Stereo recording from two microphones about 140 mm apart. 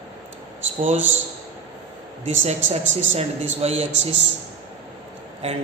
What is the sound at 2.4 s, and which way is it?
Speech, 45° right (ahead or behind).